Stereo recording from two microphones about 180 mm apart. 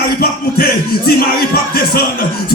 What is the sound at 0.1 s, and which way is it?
Music, 60° left (ahead or behind).